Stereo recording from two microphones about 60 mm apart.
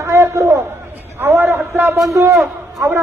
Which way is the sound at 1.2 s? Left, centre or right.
Right.